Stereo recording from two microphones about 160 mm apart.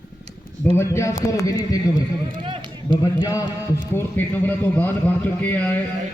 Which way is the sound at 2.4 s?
30° right (ahead or behind).